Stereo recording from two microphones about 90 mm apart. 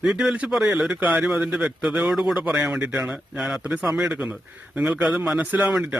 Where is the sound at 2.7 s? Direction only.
20° right (ahead or behind).